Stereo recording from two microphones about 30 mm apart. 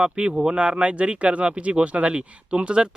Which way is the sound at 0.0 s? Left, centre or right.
Right.